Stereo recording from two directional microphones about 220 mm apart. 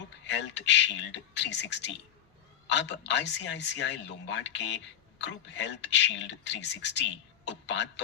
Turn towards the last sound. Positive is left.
turn(degrees=55)  # may be behind; listen again after turning